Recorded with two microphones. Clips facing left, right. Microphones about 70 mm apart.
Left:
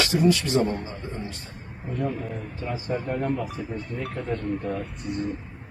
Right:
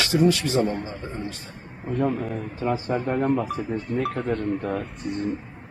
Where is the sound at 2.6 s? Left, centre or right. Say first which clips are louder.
Right 4 dB; right.